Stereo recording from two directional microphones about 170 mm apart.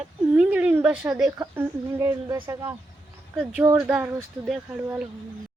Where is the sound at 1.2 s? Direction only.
20° right (ahead or behind).